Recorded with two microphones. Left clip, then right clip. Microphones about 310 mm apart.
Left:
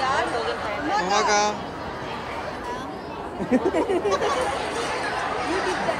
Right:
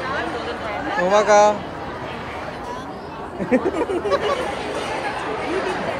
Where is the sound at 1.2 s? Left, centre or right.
Centre.